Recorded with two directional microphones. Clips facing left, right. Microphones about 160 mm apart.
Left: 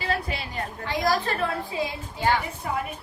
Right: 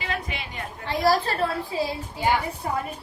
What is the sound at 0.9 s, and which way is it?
A woman's voice, 35° right (ahead or behind).